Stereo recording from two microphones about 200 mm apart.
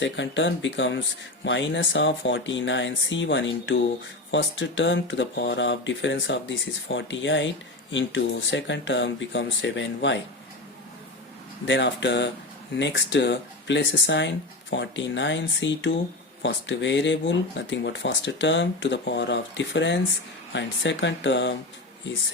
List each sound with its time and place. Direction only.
0.0 s speech: 65° left (ahead or behind)
11.6 s speech: 65° left (ahead or behind)